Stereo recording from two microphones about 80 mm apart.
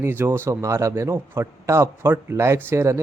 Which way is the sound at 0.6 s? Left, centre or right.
Right.